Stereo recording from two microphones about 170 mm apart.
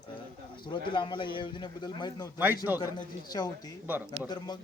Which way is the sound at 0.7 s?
30° left (ahead or behind).